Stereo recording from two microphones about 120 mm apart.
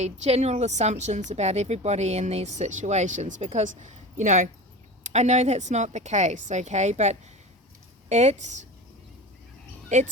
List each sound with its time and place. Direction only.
0.0 s speech: 65° right (ahead or behind); by 4.4 s 90° right
5.0 s speech: 70° right (ahead or behind)